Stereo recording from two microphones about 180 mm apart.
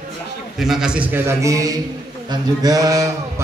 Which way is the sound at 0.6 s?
Centre (ahead or behind).